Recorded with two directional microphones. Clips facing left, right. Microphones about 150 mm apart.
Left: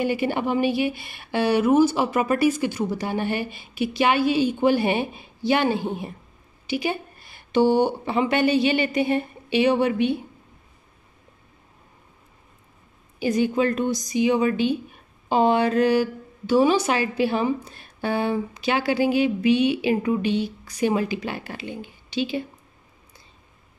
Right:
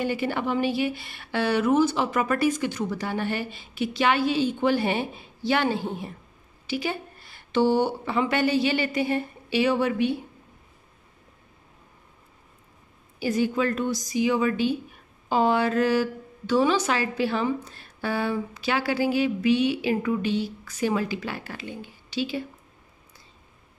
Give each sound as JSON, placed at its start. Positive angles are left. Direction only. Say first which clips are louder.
{"t": 0.0, "sound": "a woman's voice", "louder": "left 3 dB", "side_deg": 15}
{"t": 13.2, "sound": "a woman's voice", "louder": "left 3 dB", "side_deg": 20}